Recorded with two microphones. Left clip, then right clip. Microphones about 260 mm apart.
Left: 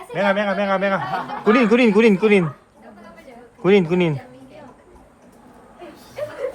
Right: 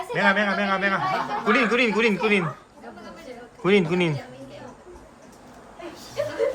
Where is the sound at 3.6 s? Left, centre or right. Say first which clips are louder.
Left 4 dB; centre.